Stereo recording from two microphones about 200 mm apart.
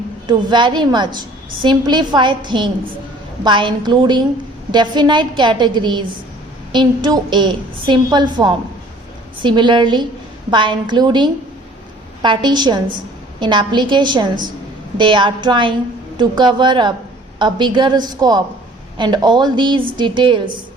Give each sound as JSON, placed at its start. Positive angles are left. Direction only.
{"t": 0.3, "sound": "a woman's voice", "side_deg": -20}